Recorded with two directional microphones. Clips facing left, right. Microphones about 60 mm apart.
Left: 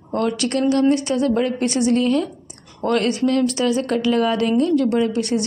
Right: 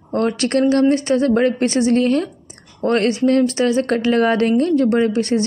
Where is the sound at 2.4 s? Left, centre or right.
Right.